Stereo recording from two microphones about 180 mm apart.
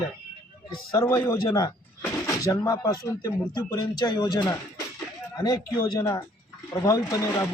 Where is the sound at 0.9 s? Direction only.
15° left (ahead or behind).